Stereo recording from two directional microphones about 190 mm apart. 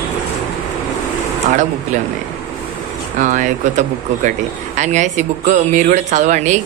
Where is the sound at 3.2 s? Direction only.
40° right (ahead or behind).